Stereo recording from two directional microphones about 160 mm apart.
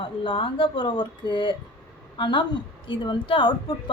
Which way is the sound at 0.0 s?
30° left (ahead or behind).